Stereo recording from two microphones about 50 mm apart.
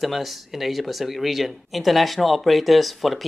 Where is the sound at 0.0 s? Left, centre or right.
Centre.